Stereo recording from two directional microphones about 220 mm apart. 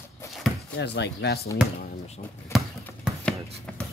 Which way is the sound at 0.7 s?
50° left (ahead or behind).